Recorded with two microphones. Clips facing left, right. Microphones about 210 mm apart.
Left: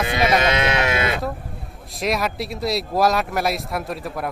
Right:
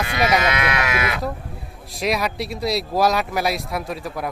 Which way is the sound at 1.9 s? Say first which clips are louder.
Even; centre (ahead or behind).